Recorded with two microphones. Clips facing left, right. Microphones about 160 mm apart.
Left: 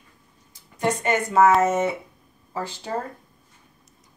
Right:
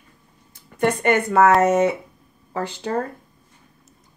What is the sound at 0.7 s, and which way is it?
A woman's voice, 60° right (ahead or behind).